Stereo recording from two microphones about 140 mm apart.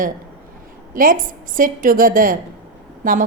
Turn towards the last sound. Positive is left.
turn(degrees=-75)  # may be behind; listen again after turning